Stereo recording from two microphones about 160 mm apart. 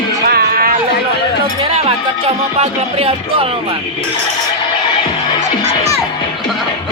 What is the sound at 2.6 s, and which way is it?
Speech, 35° right (ahead or behind).